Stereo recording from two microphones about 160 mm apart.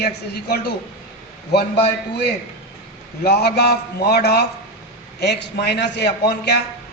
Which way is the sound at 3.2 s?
90° left.